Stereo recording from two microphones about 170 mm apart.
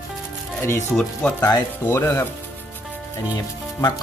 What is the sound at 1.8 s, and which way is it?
Speech, 15° left (ahead or behind).